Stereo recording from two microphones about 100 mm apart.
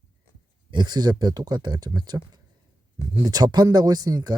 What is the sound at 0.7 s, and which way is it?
Speech, 45° right (ahead or behind).